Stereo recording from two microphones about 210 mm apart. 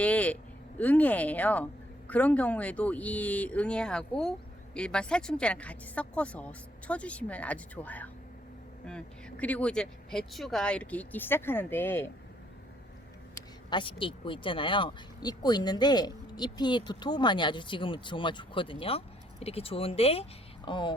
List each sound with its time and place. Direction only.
0.0 s a sound: 5° left (ahead or behind)
0.8 s speech: 5° left (ahead or behind)
13.7 s speech: 25° left (ahead or behind)